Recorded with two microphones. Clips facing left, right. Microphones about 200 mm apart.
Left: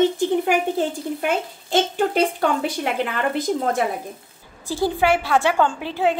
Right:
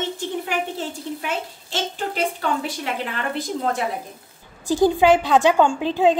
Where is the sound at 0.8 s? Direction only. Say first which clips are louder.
Left 6 dB; 55° left (ahead or behind).